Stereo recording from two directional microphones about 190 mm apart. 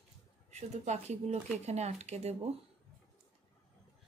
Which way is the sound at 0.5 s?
35° right (ahead or behind).